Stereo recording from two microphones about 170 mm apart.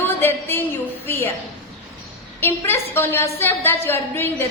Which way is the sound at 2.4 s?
15° left (ahead or behind).